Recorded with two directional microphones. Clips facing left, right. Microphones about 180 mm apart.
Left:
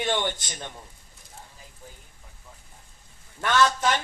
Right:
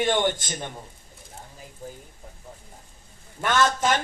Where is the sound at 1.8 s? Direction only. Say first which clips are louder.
Right 10 dB; 40° right (ahead or behind).